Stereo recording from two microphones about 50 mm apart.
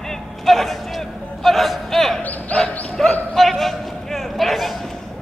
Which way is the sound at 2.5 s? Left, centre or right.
Centre.